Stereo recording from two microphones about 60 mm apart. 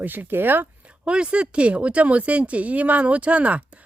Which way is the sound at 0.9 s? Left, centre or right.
Centre.